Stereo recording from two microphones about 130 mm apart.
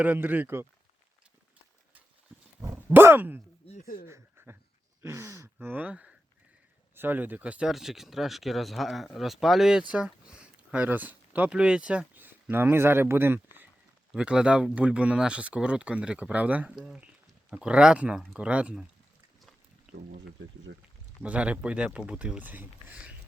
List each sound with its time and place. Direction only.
0.0 s speech: 15° right (ahead or behind)
2.6 s speech: 20° right (ahead or behind)
3.7 s a sound: 65° left (ahead or behind)
4.0 s a sound: 20° right (ahead or behind)
5.0 s speech: 20° right (ahead or behind)
14.1 s speech: 5° right (ahead or behind)
21.2 s speech: 10° right (ahead or behind)